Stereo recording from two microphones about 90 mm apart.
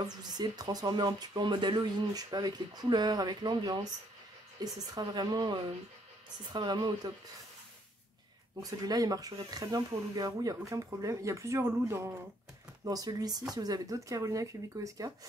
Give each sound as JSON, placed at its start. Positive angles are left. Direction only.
{"t": 0.0, "sound": "speech", "side_deg": -50}
{"t": 2.1, "sound": "speech", "side_deg": -50}
{"t": 8.6, "sound": "speech", "side_deg": -45}
{"t": 12.8, "sound": "speech", "side_deg": -45}